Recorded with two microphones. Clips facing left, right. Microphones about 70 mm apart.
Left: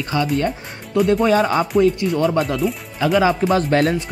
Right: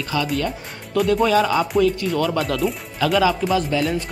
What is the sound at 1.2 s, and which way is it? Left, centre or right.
Speech, left.